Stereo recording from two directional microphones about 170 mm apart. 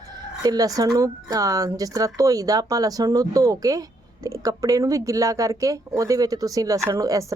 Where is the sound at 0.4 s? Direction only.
20° right (ahead or behind).